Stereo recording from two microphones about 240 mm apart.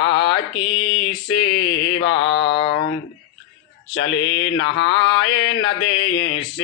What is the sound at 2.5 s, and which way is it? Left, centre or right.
Mantra, left.